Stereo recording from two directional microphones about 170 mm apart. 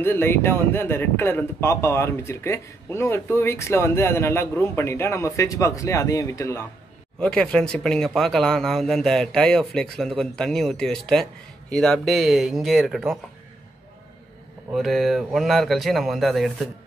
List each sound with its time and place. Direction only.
0.0 s speech: 15° left (ahead or behind)
7.2 s speech: 5° left (ahead or behind)
14.7 s speech: centre (ahead or behind)